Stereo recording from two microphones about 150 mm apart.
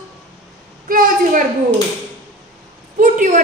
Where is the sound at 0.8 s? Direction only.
70° right (ahead or behind).